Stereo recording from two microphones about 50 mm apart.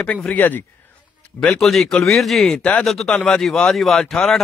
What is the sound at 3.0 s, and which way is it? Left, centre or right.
Speech, centre.